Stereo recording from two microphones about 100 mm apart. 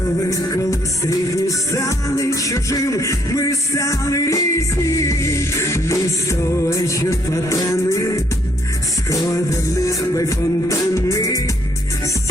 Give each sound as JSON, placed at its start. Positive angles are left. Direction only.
{"t": 0.3, "sound": "music", "side_deg": 35}